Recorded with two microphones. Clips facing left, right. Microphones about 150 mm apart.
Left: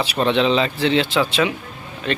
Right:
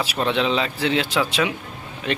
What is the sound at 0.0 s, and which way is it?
A man's voice, 5° right (ahead or behind).